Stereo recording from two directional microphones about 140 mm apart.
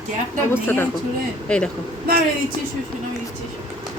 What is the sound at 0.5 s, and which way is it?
Speech, 15° left (ahead or behind).